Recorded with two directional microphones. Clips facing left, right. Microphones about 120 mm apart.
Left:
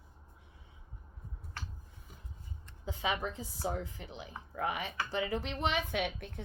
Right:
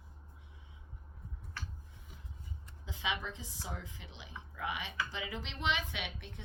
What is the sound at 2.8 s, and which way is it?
A woman's voice, 45° left (ahead or behind).